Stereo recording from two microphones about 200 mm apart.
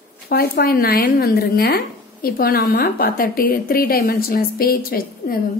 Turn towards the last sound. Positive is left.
turn(degrees=45)  # may be behind; listen again after turning